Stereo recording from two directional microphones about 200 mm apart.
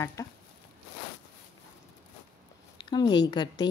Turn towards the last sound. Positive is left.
turn(degrees=20)  # may be behind; listen again after turning